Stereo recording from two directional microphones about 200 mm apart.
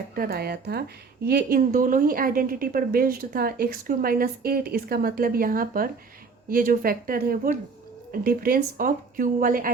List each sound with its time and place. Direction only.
0.2 s speech: 50° right (ahead or behind)